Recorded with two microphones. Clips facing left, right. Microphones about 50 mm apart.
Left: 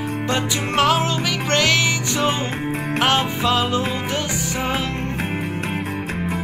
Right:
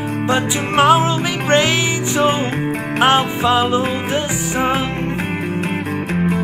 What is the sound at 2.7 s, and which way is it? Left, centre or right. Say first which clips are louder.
Music: right 3 dB; right.